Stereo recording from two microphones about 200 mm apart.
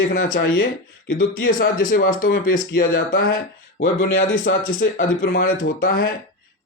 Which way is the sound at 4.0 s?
70° left (ahead or behind).